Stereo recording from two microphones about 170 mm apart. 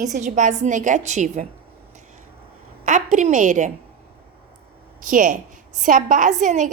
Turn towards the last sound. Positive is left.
turn(degrees=-45)  # may be behind; listen again after turning